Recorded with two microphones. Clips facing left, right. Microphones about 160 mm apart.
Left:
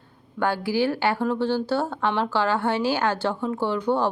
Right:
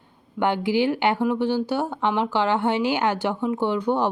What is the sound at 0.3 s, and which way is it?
Speech, 20° right (ahead or behind).